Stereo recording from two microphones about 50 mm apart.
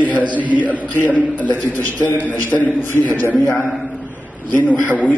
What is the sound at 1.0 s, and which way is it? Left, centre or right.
A man's voice, left.